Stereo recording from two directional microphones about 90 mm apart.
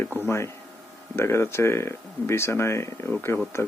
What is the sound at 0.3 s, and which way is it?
Speech, 30° left (ahead or behind).